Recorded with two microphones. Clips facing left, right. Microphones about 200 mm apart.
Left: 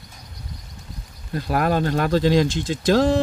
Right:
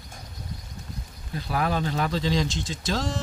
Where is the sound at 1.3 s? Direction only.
55° left (ahead or behind).